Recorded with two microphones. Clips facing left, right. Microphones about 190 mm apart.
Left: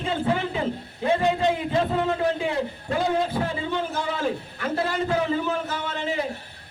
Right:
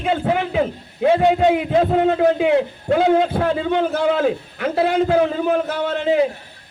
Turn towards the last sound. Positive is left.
turn(degrees=-65)  # may be behind; listen again after turning